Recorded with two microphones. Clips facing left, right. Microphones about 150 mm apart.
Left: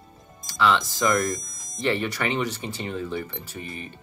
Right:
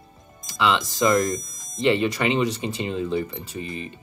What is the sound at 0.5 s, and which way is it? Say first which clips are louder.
Speech: even; 15° right (ahead or behind).